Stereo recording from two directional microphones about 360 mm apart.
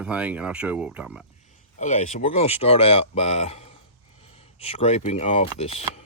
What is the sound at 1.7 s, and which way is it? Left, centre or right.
Speech, centre.